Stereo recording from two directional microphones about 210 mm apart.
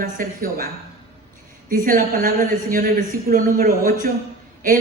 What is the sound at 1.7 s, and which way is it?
A man's voice, 40° right (ahead or behind).